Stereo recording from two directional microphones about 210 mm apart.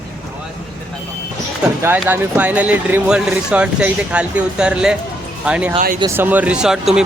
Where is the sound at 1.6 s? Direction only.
5° right (ahead or behind).